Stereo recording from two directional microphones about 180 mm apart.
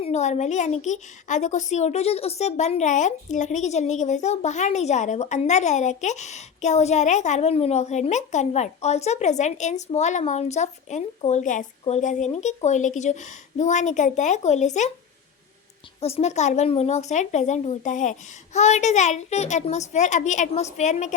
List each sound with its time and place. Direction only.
0.0 s a woman's voice: 40° left (ahead or behind)
16.0 s a woman's voice: 35° left (ahead or behind)